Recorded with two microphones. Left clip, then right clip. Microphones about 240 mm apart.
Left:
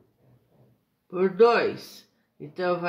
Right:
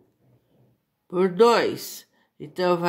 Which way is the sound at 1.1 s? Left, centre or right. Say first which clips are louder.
Right 2 dB; right.